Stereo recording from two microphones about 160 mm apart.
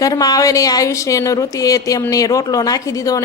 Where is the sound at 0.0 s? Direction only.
20° left (ahead or behind).